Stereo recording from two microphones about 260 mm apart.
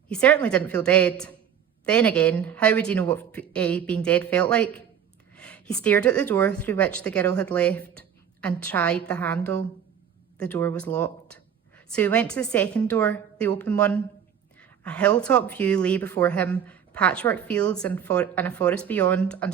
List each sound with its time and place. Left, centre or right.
0.1 s a woman's voice: centre